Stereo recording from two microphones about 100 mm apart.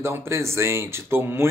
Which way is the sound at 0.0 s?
25° right (ahead or behind).